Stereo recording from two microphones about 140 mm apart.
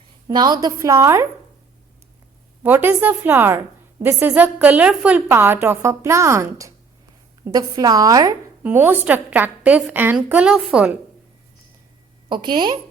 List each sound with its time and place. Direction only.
0.3 s a woman's voice: 30° right (ahead or behind)
2.6 s a woman's voice: 15° right (ahead or behind)
8.6 s a woman's voice: 15° right (ahead or behind)
12.3 s speech: 35° right (ahead or behind)